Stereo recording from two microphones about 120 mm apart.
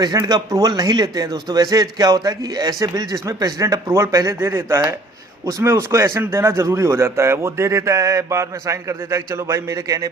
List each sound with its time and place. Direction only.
0.2 s a man's voice: 30° right (ahead or behind)